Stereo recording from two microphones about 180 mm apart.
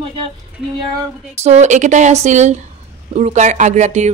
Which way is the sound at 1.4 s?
40° right (ahead or behind).